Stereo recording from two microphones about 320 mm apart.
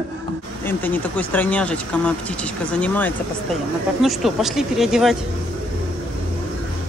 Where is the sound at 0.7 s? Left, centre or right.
Centre.